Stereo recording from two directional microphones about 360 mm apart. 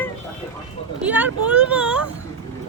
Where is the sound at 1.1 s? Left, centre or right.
Centre.